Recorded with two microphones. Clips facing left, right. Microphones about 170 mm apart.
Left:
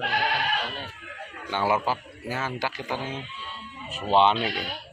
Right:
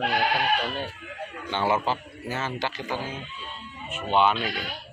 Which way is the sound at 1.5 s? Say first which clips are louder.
Even; 10° left (ahead or behind).